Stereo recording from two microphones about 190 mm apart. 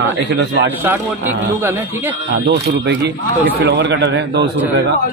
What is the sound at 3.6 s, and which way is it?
Speech, 65° right (ahead or behind).